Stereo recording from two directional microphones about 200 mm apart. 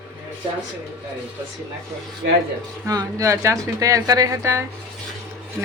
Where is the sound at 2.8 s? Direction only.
15° right (ahead or behind).